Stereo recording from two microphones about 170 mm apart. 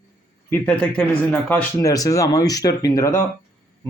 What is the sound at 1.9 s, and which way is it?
Speech, 20° left (ahead or behind).